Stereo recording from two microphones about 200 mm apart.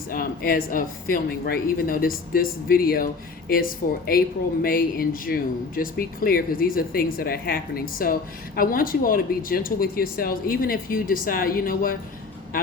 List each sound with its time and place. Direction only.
0.1 s speech: 45° left (ahead or behind)